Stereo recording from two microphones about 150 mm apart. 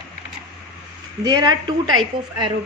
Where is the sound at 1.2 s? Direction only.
25° right (ahead or behind).